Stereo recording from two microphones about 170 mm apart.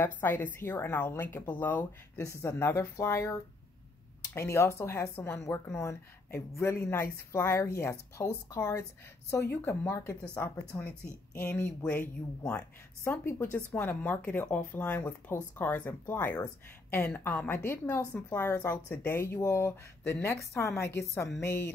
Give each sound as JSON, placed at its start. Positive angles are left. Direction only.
{"t": 0.0, "sound": "speech", "side_deg": 10}